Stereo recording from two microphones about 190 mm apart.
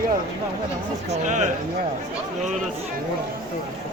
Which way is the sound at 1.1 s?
40° right (ahead or behind).